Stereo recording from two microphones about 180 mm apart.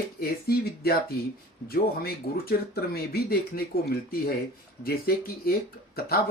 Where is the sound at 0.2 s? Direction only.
60° left (ahead or behind).